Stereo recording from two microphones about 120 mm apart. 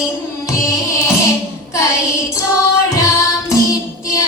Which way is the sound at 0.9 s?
25° left (ahead or behind).